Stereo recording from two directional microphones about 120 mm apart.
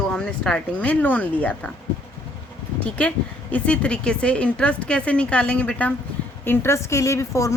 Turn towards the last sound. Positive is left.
turn(degrees=25)  # may be behind; listen again after turning